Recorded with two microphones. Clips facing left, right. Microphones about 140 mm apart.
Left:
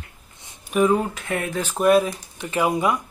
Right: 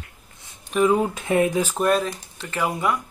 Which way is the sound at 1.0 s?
20° right (ahead or behind).